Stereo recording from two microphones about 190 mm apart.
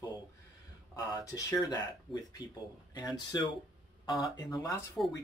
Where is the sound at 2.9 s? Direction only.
20° left (ahead or behind).